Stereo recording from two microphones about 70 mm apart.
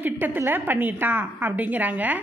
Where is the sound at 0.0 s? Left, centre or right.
Right.